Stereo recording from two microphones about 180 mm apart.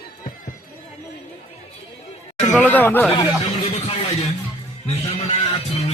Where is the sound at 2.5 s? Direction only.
10° left (ahead or behind).